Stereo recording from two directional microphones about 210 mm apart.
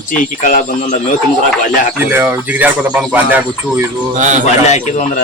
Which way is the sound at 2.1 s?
10° right (ahead or behind).